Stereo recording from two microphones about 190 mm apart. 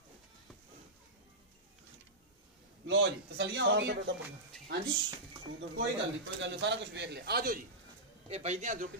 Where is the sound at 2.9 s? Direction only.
70° right (ahead or behind).